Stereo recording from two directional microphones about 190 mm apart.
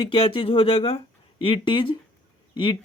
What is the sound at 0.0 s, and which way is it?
Speech, 30° left (ahead or behind).